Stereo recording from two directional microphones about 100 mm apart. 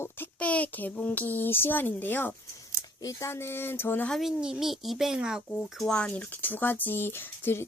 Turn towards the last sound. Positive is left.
turn(degrees=25)  # may be behind; listen again after turning